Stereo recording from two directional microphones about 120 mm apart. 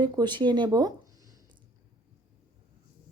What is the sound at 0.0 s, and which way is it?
Speech, 35° right (ahead or behind).